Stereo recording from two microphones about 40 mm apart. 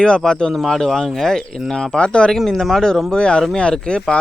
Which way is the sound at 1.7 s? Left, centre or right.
Centre.